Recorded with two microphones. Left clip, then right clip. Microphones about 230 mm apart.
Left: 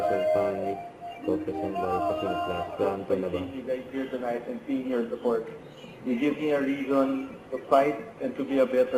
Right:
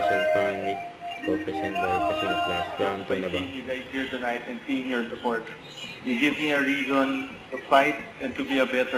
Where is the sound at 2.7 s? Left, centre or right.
Centre.